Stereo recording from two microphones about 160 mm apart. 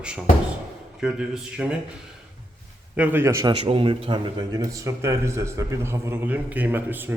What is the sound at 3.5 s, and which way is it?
A man's voice, 35° right (ahead or behind).